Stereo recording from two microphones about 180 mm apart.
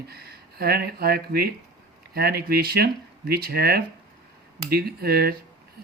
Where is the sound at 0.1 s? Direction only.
60° right (ahead or behind).